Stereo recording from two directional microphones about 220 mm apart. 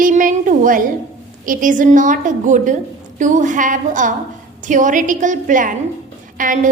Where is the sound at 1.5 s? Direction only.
35° right (ahead or behind).